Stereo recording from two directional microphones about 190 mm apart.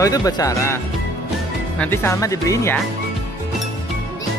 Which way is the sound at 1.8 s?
10° left (ahead or behind).